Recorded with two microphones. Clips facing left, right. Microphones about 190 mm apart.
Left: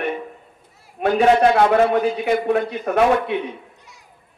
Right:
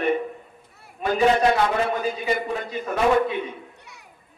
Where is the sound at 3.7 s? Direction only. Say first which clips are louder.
Right 1 dB; 65° right (ahead or behind).